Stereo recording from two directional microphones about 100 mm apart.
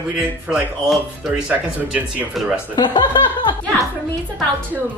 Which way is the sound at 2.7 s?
45° left (ahead or behind).